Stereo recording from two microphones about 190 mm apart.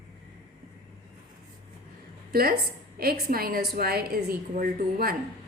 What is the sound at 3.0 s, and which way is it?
A woman's voice, 55° right (ahead or behind).